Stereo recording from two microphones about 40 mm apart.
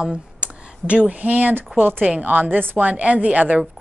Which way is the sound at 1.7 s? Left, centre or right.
Right.